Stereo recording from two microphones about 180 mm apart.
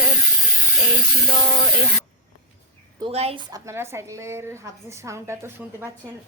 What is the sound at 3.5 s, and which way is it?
A woman's voice, 15° right (ahead or behind).